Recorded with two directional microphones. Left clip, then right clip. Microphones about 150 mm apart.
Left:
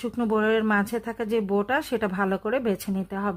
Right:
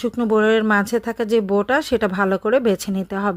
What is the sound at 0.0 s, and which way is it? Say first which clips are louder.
Speech: right 7 dB; 20° right (ahead or behind).